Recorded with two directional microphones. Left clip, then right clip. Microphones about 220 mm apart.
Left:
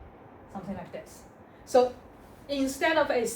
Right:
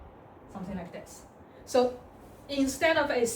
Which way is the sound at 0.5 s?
10° left (ahead or behind).